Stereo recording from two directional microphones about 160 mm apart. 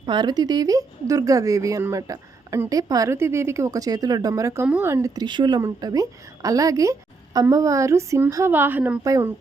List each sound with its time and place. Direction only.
0.0 s a woman's voice: 30° right (ahead or behind)